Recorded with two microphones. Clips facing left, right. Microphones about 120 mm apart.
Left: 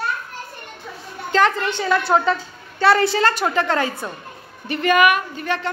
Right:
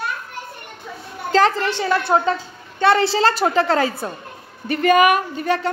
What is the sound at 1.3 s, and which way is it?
A woman's voice, 35° right (ahead or behind).